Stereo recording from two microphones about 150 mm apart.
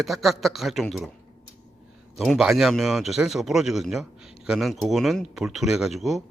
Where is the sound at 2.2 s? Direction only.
Centre (ahead or behind).